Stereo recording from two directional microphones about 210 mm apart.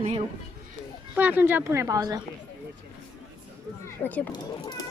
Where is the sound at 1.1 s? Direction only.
10° right (ahead or behind).